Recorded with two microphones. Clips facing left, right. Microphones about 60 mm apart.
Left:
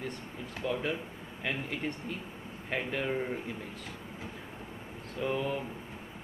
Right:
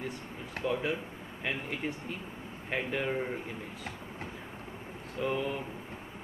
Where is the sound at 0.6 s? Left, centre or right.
Right.